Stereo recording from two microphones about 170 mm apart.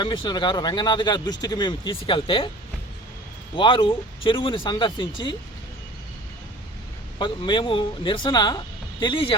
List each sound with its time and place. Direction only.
0.0 s speech: 30° left (ahead or behind)
3.5 s speech: 30° left (ahead or behind)
7.2 s speech: 30° left (ahead or behind)